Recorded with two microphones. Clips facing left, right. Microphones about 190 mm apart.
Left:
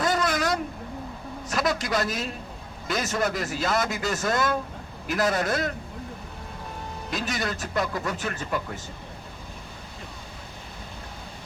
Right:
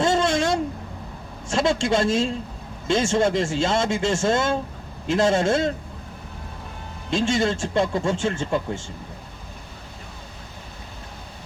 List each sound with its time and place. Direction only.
0.0 s a sound: 25° right (ahead or behind)
1.5 s speech: 25° right (ahead or behind)
7.1 s speech: 25° right (ahead or behind)